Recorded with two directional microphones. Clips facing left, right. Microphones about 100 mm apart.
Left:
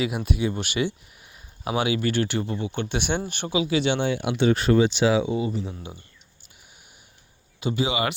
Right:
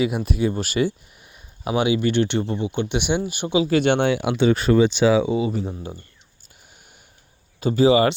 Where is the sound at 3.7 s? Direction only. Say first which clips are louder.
Right 5 dB; 55° right (ahead or behind).